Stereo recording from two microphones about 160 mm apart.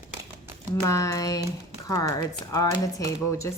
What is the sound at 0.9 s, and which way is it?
A woman's voice, 20° left (ahead or behind).